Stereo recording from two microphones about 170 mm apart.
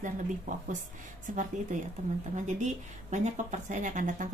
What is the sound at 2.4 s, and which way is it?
A woman's voice, 45° right (ahead or behind).